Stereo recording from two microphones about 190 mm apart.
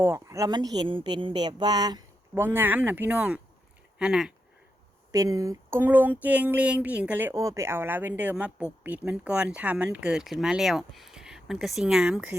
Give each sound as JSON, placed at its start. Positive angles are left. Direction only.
{"t": 0.0, "sound": "speech", "side_deg": -15}
{"t": 5.1, "sound": "speech", "side_deg": -15}